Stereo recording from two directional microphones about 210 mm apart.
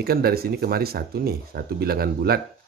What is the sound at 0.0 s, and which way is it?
Speech, 45° right (ahead or behind).